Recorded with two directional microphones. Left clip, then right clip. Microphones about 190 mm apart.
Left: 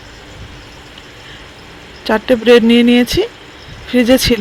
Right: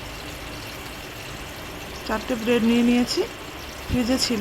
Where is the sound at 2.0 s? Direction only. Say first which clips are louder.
Left 14 dB; 30° left (ahead or behind).